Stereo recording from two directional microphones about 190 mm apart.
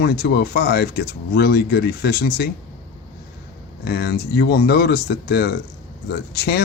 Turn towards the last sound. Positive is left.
turn(degrees=60)  # may be behind; listen again after turning